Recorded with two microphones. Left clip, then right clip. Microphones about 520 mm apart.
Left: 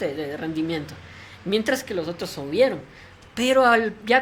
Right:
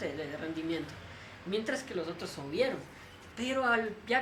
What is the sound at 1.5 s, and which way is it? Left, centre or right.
A woman's voice, left.